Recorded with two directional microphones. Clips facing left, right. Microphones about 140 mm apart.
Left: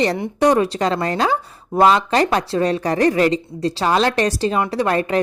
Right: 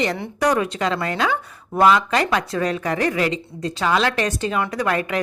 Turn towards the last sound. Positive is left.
turn(degrees=35)  # may be behind; listen again after turning